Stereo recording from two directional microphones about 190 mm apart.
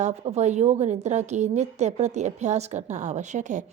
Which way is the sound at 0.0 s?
35° right (ahead or behind).